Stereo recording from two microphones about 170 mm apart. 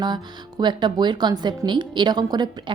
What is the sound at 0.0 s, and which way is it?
Speech, 25° right (ahead or behind).